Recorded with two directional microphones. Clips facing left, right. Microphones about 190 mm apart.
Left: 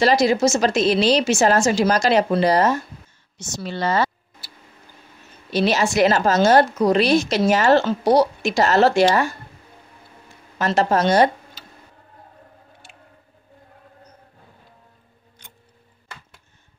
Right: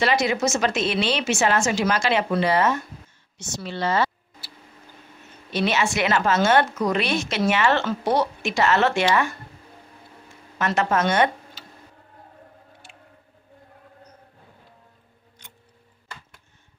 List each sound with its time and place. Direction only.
0.0 s a woman's voice: 35° left (ahead or behind)
5.5 s a woman's voice: 35° left (ahead or behind)
10.6 s speech: 35° left (ahead or behind)